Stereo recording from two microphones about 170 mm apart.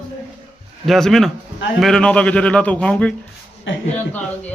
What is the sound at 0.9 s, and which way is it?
A man's voice, centre (ahead or behind).